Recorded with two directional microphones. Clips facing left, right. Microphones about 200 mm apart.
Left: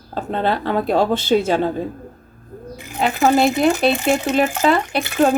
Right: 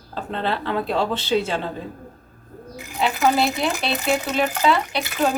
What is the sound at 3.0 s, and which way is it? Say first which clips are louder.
Speech: left 4 dB; 45° left (ahead or behind).